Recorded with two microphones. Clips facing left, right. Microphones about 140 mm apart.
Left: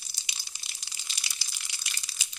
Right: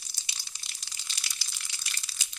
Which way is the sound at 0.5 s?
5° left (ahead or behind).